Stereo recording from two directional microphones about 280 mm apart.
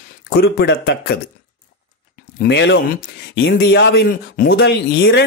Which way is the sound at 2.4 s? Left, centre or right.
Left.